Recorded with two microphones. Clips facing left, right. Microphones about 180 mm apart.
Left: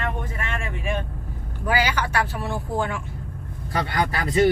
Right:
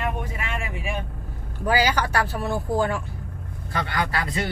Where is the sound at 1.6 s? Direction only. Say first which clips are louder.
Right 2 dB; 35° right (ahead or behind).